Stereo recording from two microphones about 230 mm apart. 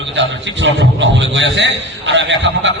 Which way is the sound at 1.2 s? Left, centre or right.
Right.